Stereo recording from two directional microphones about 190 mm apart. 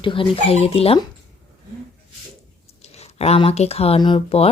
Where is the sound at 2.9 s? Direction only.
35° left (ahead or behind).